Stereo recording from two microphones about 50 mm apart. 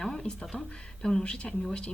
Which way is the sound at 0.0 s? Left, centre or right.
Centre.